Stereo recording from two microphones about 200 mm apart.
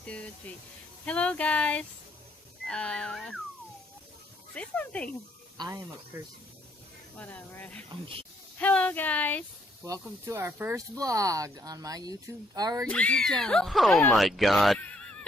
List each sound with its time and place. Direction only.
0.0 s speech: 5° left (ahead or behind)
4.6 s speech: 5° left (ahead or behind)
5.6 s speech: 15° right (ahead or behind)
7.2 s speech: 10° left (ahead or behind)
9.8 s speech: 15° right (ahead or behind)
12.9 s speech: 5° left (ahead or behind)